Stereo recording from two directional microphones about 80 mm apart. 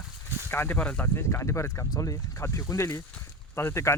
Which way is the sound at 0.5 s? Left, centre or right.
Left.